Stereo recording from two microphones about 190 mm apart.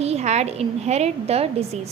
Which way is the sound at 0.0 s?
35° right (ahead or behind).